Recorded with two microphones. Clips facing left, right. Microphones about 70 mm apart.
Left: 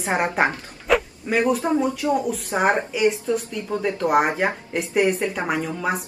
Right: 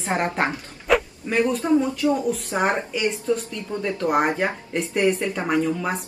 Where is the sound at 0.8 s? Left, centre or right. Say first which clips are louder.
Even; centre.